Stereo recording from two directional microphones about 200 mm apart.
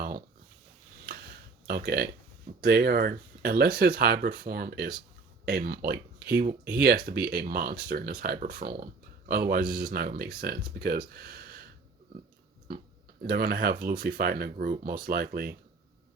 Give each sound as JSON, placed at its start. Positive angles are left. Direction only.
{"t": 1.6, "sound": "speech", "side_deg": -50}
{"t": 13.2, "sound": "speech", "side_deg": -50}